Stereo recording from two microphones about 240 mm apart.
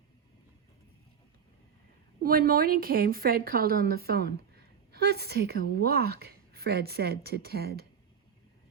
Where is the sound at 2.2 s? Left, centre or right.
Right.